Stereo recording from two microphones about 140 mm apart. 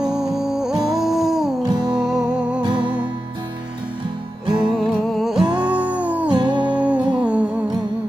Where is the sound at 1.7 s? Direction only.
30° right (ahead or behind).